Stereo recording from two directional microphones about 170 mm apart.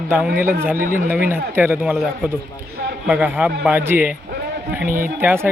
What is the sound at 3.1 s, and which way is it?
A man's voice, 10° right (ahead or behind).